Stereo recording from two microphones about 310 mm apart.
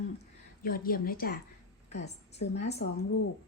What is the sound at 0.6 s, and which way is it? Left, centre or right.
A woman's voice, left.